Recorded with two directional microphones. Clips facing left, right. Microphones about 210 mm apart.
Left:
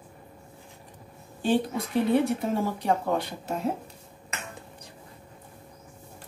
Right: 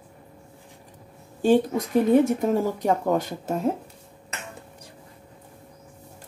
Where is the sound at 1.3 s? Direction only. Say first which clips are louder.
Right 6 dB; 45° right (ahead or behind).